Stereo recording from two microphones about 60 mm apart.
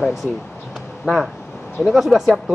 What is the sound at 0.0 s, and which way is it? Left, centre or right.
Speech, centre.